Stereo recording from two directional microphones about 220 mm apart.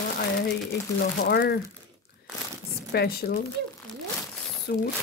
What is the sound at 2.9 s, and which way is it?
Speech, 45° left (ahead or behind).